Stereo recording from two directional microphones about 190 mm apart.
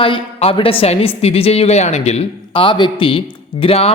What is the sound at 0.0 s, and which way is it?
A woman's voice, 30° left (ahead or behind).